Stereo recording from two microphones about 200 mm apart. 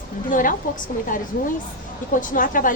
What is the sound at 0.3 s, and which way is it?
A woman's voice, 40° left (ahead or behind).